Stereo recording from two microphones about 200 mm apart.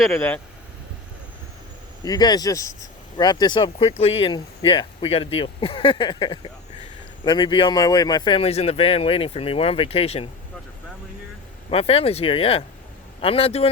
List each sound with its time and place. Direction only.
0.0 s speech: 5° left (ahead or behind)
2.0 s speech: 20° left (ahead or behind)
11.7 s speech: 30° left (ahead or behind)